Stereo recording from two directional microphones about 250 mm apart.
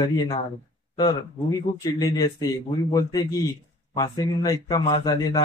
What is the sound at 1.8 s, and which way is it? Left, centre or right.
A man's voice, centre.